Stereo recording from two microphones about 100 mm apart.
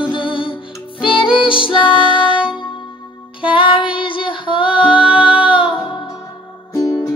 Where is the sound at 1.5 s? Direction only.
60° left (ahead or behind).